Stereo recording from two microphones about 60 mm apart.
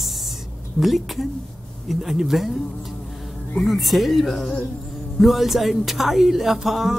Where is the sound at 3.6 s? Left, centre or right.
Centre.